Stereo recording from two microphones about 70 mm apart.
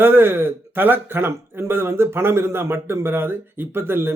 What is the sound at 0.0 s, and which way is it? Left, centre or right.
Speech, right.